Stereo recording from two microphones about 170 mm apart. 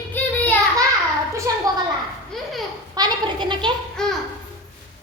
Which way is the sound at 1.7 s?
20° right (ahead or behind).